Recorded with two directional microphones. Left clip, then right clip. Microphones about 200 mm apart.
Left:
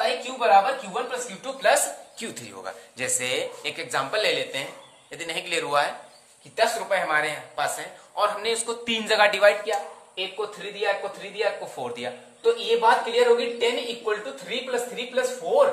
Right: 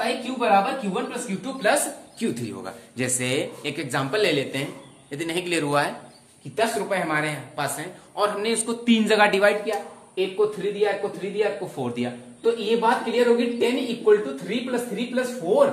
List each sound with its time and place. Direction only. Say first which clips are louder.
0.0 s a sound: left 1 dB; 20° left (ahead or behind)
0.9 s speech: even; 20° left (ahead or behind)
3.0 s speech: right 1 dB; centre (ahead or behind)